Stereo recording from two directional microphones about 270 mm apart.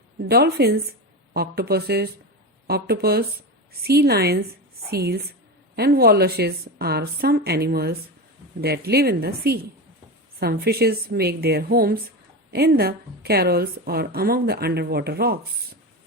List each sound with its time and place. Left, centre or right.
0.2 s a woman's voice: right